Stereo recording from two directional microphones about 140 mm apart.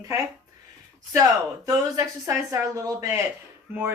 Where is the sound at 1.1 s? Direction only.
25° right (ahead or behind).